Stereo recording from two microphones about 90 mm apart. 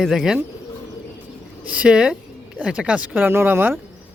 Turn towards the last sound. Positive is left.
turn(degrees=-20)  # may be behind; listen again after turning